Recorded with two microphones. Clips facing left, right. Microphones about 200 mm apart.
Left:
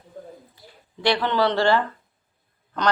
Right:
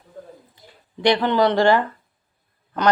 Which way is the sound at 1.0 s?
15° right (ahead or behind).